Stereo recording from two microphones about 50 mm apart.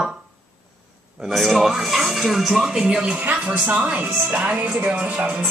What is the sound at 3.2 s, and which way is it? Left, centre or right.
Speech, right.